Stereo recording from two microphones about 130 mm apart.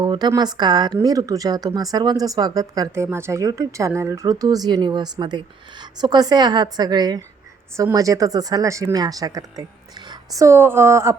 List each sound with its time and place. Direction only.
0.0 s a woman's voice: 35° right (ahead or behind)